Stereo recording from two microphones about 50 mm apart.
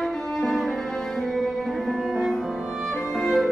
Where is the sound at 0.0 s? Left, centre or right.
Centre.